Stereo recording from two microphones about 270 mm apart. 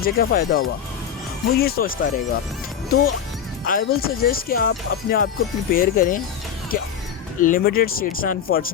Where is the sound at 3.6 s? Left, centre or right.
Left.